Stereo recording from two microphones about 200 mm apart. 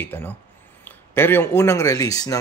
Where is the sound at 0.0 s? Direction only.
10° left (ahead or behind).